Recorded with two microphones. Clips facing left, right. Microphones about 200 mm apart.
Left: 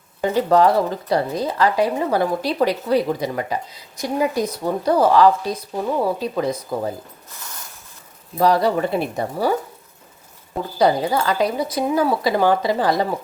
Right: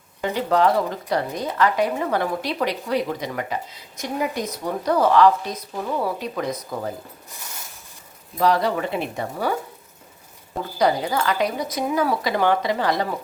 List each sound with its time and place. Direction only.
0.2 s a woman's voice: 35° left (ahead or behind)
8.4 s a woman's voice: 35° left (ahead or behind)
10.8 s a woman's voice: 30° left (ahead or behind)